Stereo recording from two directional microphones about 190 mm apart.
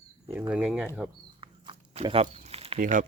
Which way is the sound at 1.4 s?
25° right (ahead or behind).